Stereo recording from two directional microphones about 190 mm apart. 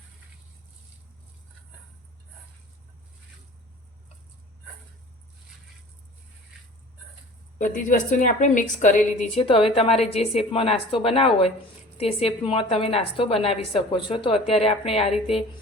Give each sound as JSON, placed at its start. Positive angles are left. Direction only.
{"t": 7.6, "sound": "a woman's voice", "side_deg": 40}